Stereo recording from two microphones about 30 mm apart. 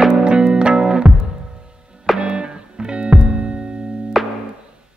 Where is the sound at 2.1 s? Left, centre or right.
Centre.